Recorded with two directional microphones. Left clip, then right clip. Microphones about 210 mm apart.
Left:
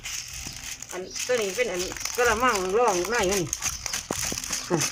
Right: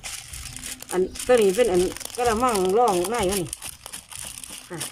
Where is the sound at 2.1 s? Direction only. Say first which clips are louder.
Even; 20° right (ahead or behind).